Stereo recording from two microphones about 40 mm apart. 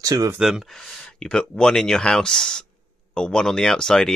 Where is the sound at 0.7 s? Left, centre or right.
Centre.